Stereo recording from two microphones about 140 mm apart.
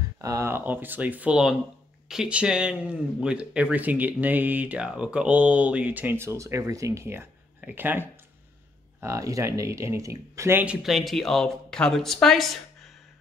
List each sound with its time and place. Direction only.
0.2 s speech: 20° right (ahead or behind)
10.6 s speech: 5° right (ahead or behind)